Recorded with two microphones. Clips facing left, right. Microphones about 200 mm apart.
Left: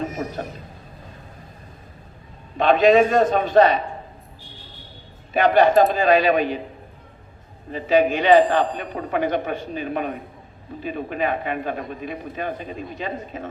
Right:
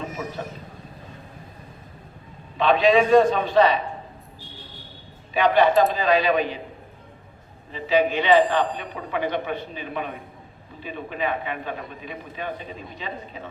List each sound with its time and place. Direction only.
0.0 s a sound: 45° left (ahead or behind)
2.6 s a man's voice: 45° left (ahead or behind)
5.3 s a man's voice: 50° left (ahead or behind)
7.7 s a man's voice: 50° left (ahead or behind)